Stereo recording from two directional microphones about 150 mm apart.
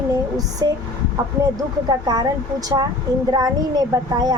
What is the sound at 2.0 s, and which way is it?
Speech, 25° right (ahead or behind).